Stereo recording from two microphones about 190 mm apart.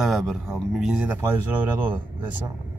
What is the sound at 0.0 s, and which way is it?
Speech, centre (ahead or behind).